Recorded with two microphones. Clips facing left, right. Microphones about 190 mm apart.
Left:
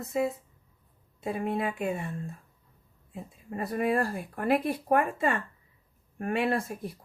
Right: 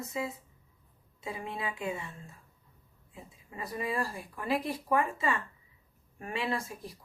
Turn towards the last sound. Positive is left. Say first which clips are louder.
# left 6 dB
turn(degrees=55)  # may be behind; listen again after turning